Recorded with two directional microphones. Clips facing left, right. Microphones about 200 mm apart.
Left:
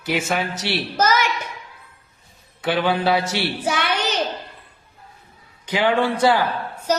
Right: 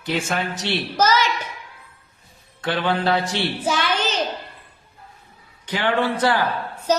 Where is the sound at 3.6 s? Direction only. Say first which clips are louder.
Right 1 dB; 65° left (ahead or behind).